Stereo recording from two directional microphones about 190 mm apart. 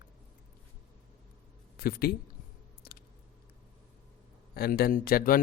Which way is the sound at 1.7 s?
55° left (ahead or behind).